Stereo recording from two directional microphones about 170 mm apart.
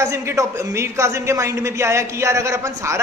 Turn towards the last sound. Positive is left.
turn(degrees=-15)  # may be behind; listen again after turning